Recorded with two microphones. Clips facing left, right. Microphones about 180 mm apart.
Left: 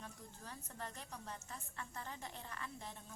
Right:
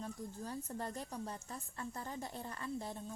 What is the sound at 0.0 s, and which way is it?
A woman's voice, 35° right (ahead or behind).